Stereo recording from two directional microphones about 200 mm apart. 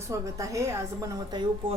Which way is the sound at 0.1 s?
15° right (ahead or behind).